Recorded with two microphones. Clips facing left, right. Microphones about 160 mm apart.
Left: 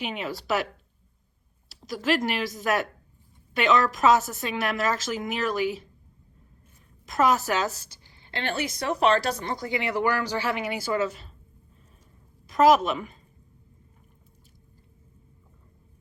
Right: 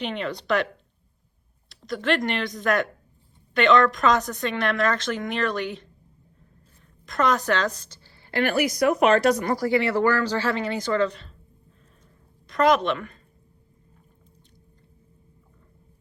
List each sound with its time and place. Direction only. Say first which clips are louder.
0.0 s speech: right 3 dB; 5° left (ahead or behind)
1.7 s speech: right 1 dB; centre (ahead or behind)
7.0 s a woman's voice: even; 5° left (ahead or behind)
12.5 s a woman's voice: left 1 dB; 5° left (ahead or behind)